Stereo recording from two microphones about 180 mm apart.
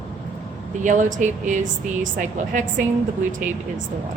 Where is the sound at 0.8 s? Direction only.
45° right (ahead or behind).